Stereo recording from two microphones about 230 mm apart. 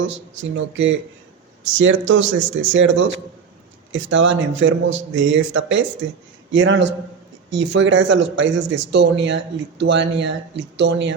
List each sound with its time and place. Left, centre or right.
0.0 s speech: right
2.4 s speech: right
2.7 s speech: right